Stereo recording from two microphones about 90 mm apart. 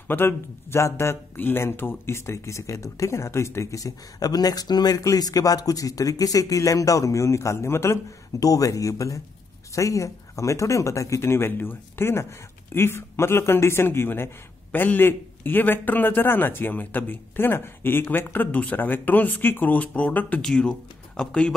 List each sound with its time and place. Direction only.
0.1 s a man's voice: 25° left (ahead or behind)
8.4 s a man's voice: 40° left (ahead or behind); by 21.5 s 10° left (ahead or behind)